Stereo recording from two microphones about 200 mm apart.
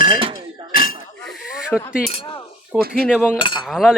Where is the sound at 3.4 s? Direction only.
25° left (ahead or behind).